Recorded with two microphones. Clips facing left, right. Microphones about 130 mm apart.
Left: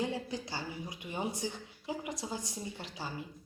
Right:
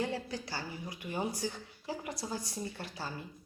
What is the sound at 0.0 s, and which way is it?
Speech, 20° left (ahead or behind).